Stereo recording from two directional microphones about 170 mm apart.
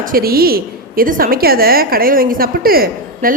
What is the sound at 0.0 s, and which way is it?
A woman's voice, 60° right (ahead or behind).